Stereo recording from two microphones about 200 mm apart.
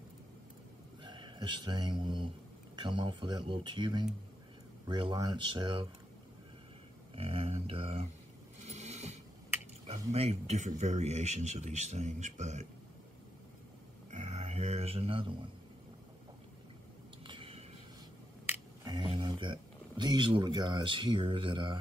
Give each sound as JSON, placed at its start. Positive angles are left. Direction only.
{"t": 1.0, "sound": "speech", "side_deg": -20}
{"t": 7.2, "sound": "speech", "side_deg": -30}
{"t": 8.6, "sound": "a sound", "side_deg": -35}
{"t": 10.1, "sound": "speech", "side_deg": -30}
{"t": 14.1, "sound": "speech", "side_deg": -35}
{"t": 17.3, "sound": "whispering", "side_deg": -25}
{"t": 18.9, "sound": "speech", "side_deg": -25}